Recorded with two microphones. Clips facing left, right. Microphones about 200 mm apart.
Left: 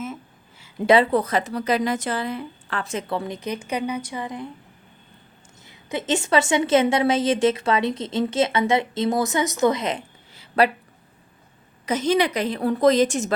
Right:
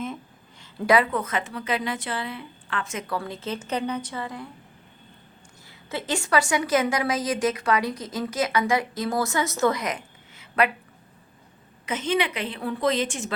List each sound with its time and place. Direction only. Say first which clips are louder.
0.8 s a woman's voice: left 4 dB; 25° left (ahead or behind)
3.2 s a woman's voice: left 3 dB; 20° left (ahead or behind)
5.6 s a woman's voice: left 5 dB; 20° left (ahead or behind)
11.9 s a woman's voice: left 5 dB; 40° left (ahead or behind)